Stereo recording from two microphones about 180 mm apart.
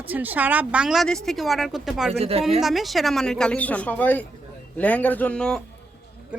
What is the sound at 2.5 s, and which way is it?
Speech, centre (ahead or behind).